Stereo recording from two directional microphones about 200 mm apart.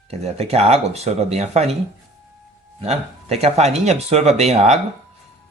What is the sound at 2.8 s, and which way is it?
Speech, 30° right (ahead or behind).